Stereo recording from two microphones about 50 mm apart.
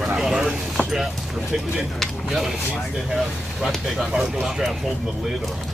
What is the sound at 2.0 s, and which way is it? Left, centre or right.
Speech, centre.